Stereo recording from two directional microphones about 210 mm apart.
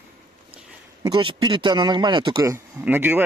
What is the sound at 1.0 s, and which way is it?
Speech, 20° right (ahead or behind).